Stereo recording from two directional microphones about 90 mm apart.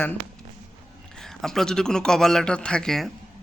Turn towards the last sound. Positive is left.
turn(degrees=5)  # may be behind; listen again after turning